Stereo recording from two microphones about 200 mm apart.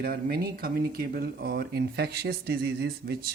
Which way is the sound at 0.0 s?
50° right (ahead or behind).